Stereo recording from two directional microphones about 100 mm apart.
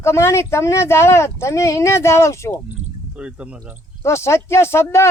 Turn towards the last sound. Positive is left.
turn(degrees=25)  # may be behind; listen again after turning